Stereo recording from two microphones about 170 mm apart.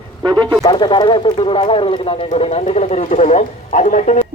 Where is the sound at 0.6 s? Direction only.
25° left (ahead or behind); by 4.2 s 45° left (ahead or behind).